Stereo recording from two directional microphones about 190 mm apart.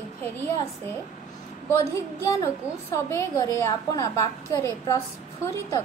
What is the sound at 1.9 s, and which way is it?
A woman's voice, 15° left (ahead or behind).